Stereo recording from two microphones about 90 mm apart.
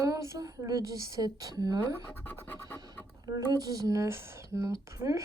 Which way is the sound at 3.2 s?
45° right (ahead or behind).